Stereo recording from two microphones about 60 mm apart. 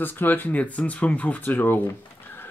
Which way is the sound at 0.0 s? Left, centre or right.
Left.